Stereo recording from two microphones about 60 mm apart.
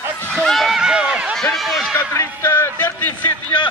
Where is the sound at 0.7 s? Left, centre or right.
Centre.